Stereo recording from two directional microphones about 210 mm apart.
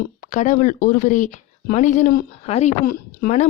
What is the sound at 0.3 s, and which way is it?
A woman's voice, 35° left (ahead or behind).